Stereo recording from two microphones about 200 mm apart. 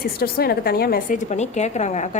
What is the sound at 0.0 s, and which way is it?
A woman's voice, 50° left (ahead or behind).